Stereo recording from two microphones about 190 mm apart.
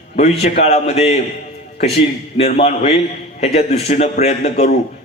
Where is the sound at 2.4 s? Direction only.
35° left (ahead or behind).